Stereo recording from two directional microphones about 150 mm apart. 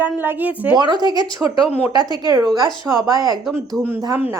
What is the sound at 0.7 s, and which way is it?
Speech, 30° right (ahead or behind).